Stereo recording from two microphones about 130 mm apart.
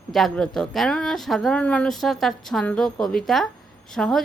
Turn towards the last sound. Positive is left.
turn(degrees=5)  # may be behind; listen again after turning